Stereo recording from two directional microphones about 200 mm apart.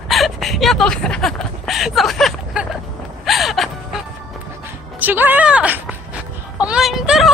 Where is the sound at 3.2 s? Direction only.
Centre (ahead or behind).